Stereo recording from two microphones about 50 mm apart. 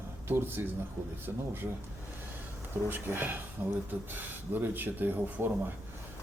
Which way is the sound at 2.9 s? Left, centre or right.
Right.